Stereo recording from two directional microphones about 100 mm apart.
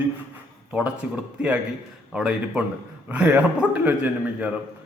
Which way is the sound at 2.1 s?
10° right (ahead or behind).